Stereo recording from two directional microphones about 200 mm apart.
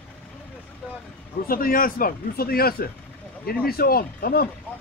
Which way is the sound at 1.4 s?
45° left (ahead or behind).